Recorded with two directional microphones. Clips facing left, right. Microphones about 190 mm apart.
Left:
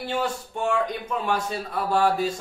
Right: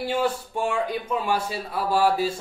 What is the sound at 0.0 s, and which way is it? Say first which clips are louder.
Speech: right 3 dB; 10° right (ahead or behind).